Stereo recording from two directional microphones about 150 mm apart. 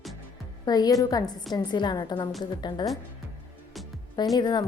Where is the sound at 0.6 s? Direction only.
25° left (ahead or behind).